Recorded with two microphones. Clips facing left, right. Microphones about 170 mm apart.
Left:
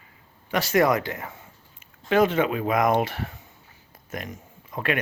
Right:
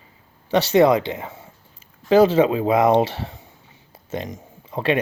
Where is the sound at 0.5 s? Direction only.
25° right (ahead or behind).